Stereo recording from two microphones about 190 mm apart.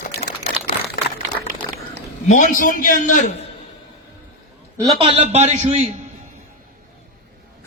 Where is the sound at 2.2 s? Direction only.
40° left (ahead or behind).